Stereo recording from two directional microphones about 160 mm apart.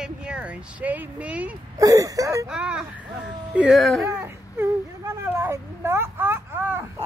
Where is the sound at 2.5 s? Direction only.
5° right (ahead or behind).